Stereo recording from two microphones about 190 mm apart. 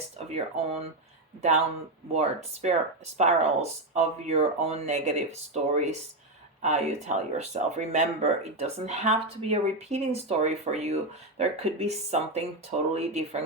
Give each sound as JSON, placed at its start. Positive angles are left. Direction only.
{"t": 0.3, "sound": "speech", "side_deg": -35}
{"t": 2.1, "sound": "speech", "side_deg": -35}